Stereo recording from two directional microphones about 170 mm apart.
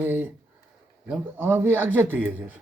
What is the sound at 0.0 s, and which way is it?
Speech, 10° right (ahead or behind).